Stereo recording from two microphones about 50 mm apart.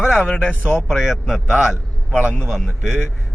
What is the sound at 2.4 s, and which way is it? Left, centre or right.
Speech, centre.